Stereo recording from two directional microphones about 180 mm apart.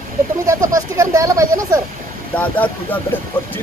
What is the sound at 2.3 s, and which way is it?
Speech, 5° left (ahead or behind).